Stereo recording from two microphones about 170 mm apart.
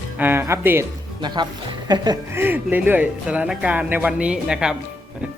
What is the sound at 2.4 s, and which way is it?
Speech, 10° right (ahead or behind).